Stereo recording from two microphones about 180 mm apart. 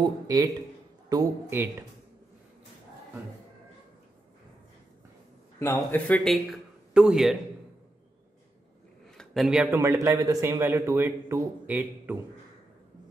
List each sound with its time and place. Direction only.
0.0 s a man's voice: 20° right (ahead or behind)
5.6 s a man's voice: 10° left (ahead or behind)
9.1 s a man's voice: centre (ahead or behind)